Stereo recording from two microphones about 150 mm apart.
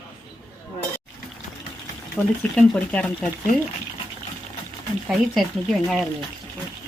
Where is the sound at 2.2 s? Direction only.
5° left (ahead or behind).